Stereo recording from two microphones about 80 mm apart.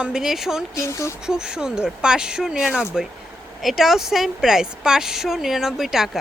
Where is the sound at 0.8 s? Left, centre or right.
Left.